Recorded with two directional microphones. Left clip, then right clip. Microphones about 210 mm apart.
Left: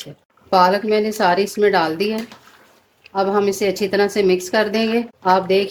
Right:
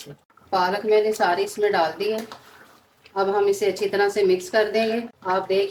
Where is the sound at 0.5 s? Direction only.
55° left (ahead or behind).